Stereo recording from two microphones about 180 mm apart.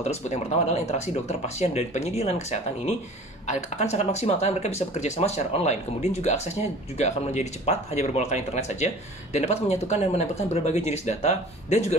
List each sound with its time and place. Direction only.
0.0 s speech: 40° left (ahead or behind)